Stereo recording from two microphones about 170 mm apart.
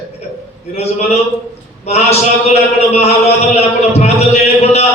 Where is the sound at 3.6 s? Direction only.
40° left (ahead or behind).